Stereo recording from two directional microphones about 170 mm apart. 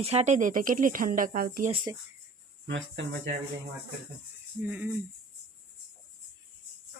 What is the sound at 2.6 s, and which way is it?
Speech, 90° right.